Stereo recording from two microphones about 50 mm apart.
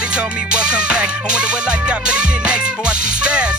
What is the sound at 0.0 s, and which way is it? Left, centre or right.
Music, centre.